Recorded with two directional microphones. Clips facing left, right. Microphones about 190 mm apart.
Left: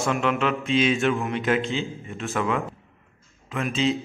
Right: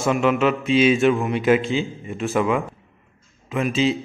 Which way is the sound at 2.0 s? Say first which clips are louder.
Right 5 dB; 15° right (ahead or behind).